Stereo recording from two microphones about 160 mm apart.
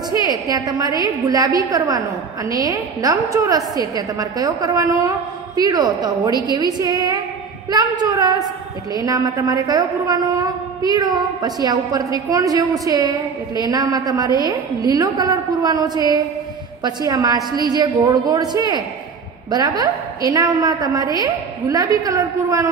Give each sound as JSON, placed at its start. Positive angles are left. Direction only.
{"t": 0.1, "sound": "a woman's voice", "side_deg": -20}
{"t": 6.5, "sound": "a woman's voice", "side_deg": -20}
{"t": 19.8, "sound": "a woman's voice", "side_deg": -25}